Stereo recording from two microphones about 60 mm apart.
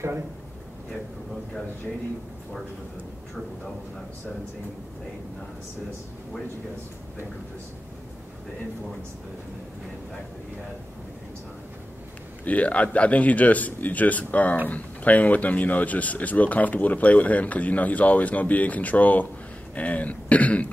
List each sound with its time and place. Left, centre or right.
12.4 s speech: left